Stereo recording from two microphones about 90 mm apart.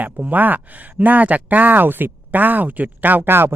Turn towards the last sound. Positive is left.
turn(degrees=-25)  # may be behind; listen again after turning